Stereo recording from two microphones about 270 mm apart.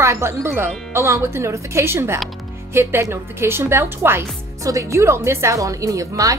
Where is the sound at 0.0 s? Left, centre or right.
Centre.